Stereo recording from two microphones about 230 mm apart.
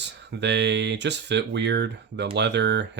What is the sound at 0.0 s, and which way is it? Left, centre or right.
Speech, right.